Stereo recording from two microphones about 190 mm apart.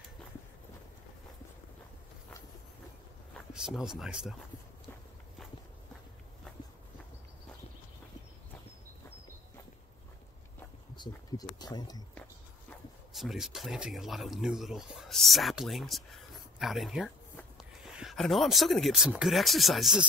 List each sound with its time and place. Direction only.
3.3 s speech: centre (ahead or behind)
11.0 s speech: 20° left (ahead or behind)
13.1 s speech: centre (ahead or behind)